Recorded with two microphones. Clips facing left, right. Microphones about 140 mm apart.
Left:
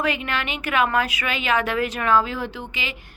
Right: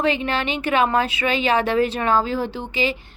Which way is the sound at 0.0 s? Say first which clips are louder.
Right 4 dB; 30° right (ahead or behind).